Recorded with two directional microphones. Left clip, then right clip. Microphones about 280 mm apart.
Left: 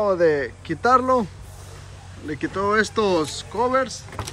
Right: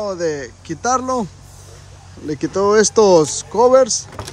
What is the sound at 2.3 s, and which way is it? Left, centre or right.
Speech, right.